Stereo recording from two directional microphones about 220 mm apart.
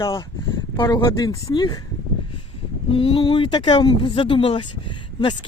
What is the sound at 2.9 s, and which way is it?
Speech, 25° left (ahead or behind).